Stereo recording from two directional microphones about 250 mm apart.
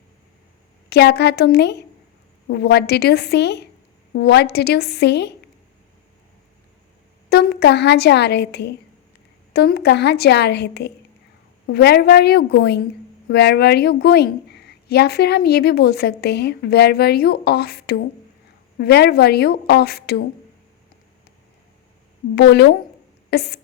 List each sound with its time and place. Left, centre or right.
0.9 s a woman's voice: left
7.3 s a woman's voice: left
22.4 s a woman's voice: left